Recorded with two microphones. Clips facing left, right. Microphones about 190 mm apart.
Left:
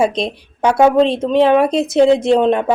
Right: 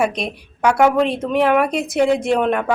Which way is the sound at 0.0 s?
25° left (ahead or behind).